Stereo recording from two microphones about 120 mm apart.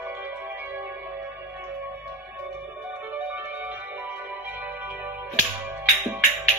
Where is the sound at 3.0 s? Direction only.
15° right (ahead or behind).